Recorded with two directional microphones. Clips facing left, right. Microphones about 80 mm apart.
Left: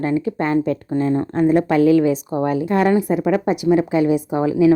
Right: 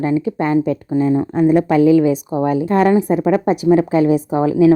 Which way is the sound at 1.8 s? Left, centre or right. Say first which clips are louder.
Right 2 dB; centre.